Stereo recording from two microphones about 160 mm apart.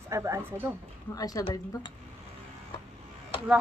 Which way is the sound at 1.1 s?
25° left (ahead or behind).